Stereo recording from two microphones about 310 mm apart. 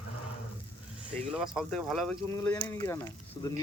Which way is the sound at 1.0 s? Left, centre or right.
Centre.